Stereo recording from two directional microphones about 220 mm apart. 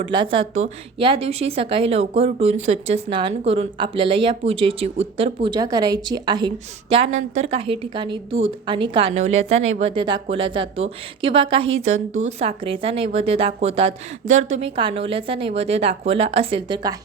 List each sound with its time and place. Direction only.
0.0 s a woman's voice: 20° right (ahead or behind)